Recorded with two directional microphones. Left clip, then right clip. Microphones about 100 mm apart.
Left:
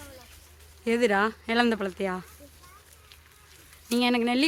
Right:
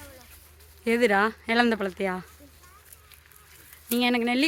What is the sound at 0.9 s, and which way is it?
Speech, 10° right (ahead or behind).